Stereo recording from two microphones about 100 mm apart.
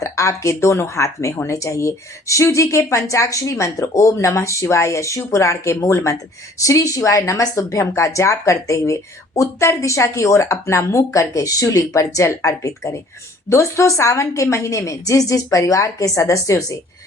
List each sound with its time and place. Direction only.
0.0 s a woman's voice: 30° left (ahead or behind)